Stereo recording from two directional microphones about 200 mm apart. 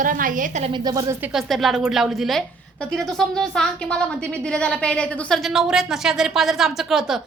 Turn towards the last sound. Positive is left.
turn(degrees=0)  # may be behind; listen again after turning